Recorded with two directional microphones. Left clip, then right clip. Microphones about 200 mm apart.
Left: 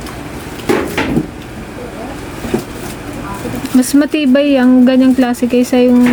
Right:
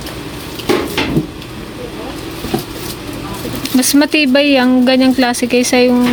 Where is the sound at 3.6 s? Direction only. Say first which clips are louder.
Even; 5° left (ahead or behind).